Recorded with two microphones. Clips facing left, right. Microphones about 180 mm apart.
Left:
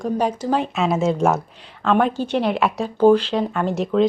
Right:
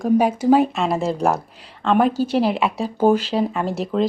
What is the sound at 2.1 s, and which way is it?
Speech, 40° right (ahead or behind).